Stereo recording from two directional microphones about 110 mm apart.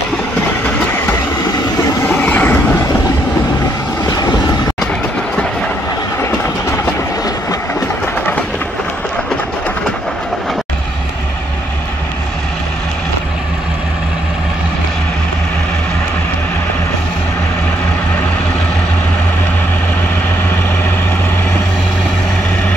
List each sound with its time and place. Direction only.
2.0 s vehicle: 15° left (ahead or behind)
4.0 s vehicle: 35° left (ahead or behind)